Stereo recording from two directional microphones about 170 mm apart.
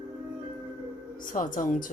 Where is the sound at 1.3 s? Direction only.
55° left (ahead or behind).